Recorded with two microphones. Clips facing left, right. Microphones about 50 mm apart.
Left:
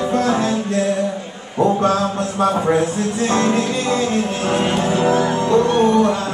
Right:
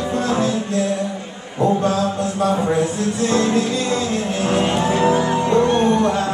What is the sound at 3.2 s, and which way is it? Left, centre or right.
Music, left.